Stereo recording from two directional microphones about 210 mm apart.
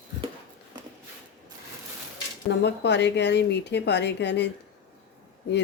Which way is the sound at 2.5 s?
55° left (ahead or behind).